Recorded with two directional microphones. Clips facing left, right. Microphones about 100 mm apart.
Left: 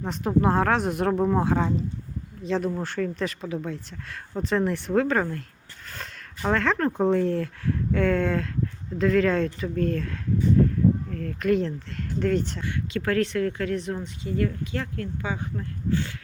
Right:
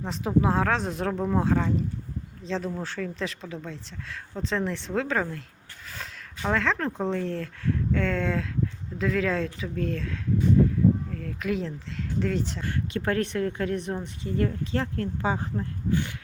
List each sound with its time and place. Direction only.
0.0 s speech: centre (ahead or behind)
12.9 s speech: 25° right (ahead or behind)
15.9 s speech: 20° right (ahead or behind)